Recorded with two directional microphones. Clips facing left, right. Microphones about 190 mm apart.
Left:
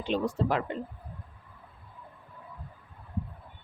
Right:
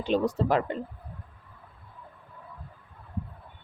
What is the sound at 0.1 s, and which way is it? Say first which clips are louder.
Speech: right 3 dB; 40° right (ahead or behind).